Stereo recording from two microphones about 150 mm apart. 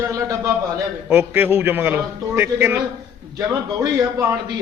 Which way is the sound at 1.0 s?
15° right (ahead or behind).